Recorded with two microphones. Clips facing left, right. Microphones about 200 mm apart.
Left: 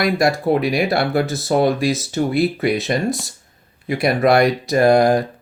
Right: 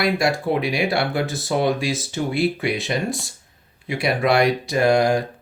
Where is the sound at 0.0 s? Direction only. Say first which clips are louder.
Left 3 dB; 40° left (ahead or behind).